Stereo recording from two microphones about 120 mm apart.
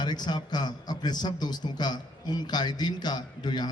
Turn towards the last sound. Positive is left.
turn(degrees=35)  # may be behind; listen again after turning